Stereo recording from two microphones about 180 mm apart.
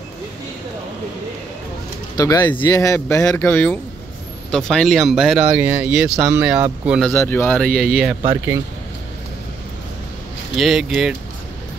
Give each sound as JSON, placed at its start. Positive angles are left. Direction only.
{"t": 2.1, "sound": "speech", "side_deg": 20}
{"t": 7.1, "sound": "speech", "side_deg": 10}
{"t": 10.6, "sound": "speech", "side_deg": 0}